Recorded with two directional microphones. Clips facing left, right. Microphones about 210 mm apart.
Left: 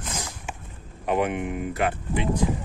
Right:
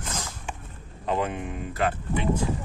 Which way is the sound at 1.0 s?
15° left (ahead or behind).